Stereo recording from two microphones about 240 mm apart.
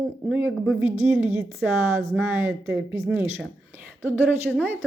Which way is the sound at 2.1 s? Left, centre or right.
Centre.